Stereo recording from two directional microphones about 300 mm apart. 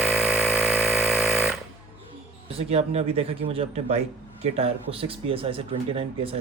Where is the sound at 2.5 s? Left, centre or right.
Centre.